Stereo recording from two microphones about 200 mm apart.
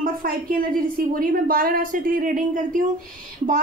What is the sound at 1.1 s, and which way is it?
Speech, 45° right (ahead or behind).